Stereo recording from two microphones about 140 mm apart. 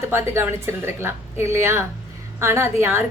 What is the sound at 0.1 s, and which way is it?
A woman's voice, 15° right (ahead or behind).